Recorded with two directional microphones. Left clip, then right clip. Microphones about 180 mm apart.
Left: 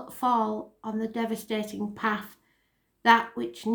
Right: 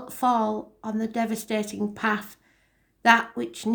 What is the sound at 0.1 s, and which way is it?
Speech, 35° right (ahead or behind).